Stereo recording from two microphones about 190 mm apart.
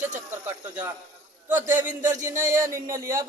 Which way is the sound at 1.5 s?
10° right (ahead or behind).